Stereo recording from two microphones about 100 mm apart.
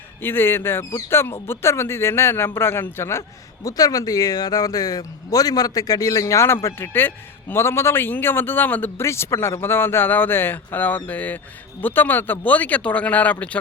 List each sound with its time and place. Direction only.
0.2 s a man's voice: 20° left (ahead or behind)